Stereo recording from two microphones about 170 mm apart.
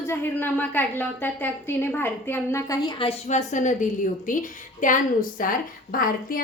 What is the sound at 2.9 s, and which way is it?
A woman's voice, 35° left (ahead or behind).